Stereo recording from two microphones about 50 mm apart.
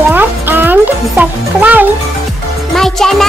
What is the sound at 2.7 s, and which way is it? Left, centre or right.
Speech, centre.